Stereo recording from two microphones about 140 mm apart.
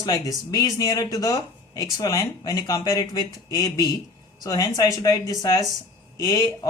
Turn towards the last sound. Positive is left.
turn(degrees=25)  # may be behind; listen again after turning